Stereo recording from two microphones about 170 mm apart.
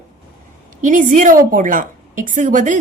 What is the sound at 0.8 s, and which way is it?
Speech, 50° right (ahead or behind).